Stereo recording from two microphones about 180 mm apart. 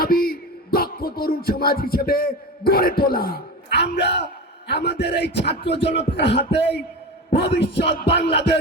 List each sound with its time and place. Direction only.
0.0 s music: 55° left (ahead or behind); by 4.3 s 70° left (ahead or behind)
4.7 s beatboxing: 70° left (ahead or behind)